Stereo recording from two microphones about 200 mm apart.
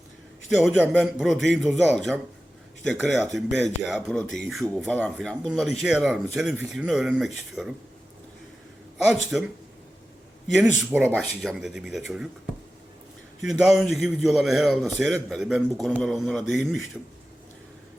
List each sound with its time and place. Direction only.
0.5 s a man's voice: centre (ahead or behind)
9.3 s a man's voice: centre (ahead or behind)
10.8 s a man's voice: 5° right (ahead or behind)
13.4 s a man's voice: centre (ahead or behind)